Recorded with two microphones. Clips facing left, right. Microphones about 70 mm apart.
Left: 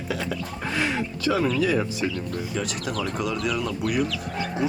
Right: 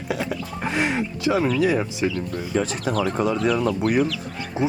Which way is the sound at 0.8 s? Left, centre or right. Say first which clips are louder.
Right 2 dB; right.